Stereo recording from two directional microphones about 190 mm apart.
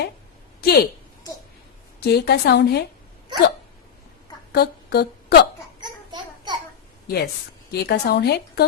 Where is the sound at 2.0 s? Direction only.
55° left (ahead or behind).